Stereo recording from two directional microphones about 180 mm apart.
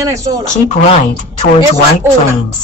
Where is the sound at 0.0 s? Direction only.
15° right (ahead or behind).